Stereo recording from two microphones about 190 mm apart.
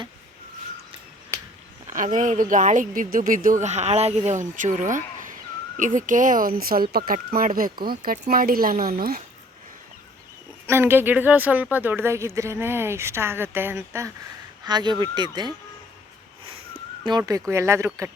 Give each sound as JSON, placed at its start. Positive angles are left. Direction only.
{"t": 1.9, "sound": "speech", "side_deg": -45}
{"t": 10.7, "sound": "speech", "side_deg": -10}
{"t": 17.0, "sound": "speech", "side_deg": -20}